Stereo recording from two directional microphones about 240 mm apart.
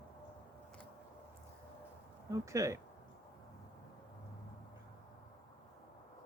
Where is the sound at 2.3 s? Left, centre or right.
Centre.